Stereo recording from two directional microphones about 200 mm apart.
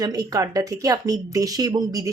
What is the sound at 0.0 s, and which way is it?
Speech, 15° right (ahead or behind).